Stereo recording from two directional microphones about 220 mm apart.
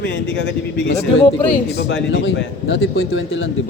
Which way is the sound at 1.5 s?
50° left (ahead or behind).